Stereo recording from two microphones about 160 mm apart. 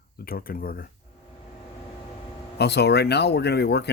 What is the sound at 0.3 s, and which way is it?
Speech, 65° left (ahead or behind).